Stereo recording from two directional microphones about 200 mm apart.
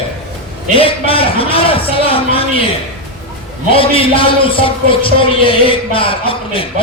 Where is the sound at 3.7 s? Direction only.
25° left (ahead or behind).